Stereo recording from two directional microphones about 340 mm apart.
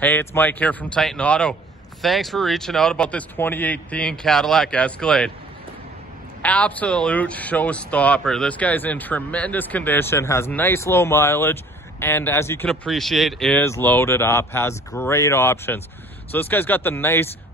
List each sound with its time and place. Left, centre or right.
0.0 s a man's voice: centre
6.4 s a man's voice: centre